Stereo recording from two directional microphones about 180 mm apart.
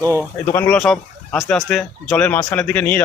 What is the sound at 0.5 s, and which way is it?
Speech, 10° left (ahead or behind).